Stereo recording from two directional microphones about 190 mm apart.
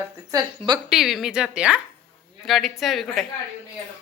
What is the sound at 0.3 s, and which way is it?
Speech, 20° right (ahead or behind).